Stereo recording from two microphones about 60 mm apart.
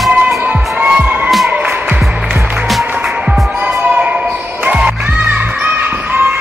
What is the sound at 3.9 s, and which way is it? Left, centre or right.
Music, right.